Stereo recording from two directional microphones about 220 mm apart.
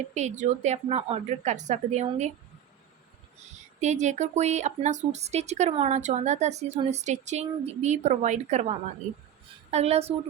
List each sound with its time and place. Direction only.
0.1 s speech: 30° right (ahead or behind)
3.8 s speech: 30° right (ahead or behind)
9.7 s a woman's voice: 30° right (ahead or behind)